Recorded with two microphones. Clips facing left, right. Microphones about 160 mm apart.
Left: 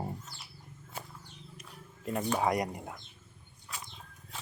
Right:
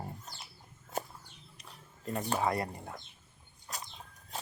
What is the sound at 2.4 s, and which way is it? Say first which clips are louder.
Speech: left 2 dB; 15° left (ahead or behind).